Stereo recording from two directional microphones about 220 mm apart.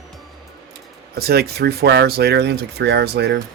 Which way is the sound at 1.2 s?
45° right (ahead or behind).